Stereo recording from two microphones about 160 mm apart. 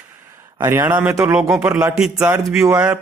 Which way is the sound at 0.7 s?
10° right (ahead or behind).